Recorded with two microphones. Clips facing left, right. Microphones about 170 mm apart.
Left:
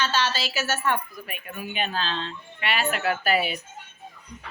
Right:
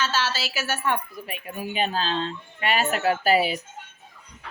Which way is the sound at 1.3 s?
30° right (ahead or behind).